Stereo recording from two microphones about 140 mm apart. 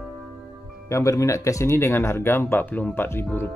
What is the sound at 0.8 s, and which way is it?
Speech, 20° left (ahead or behind).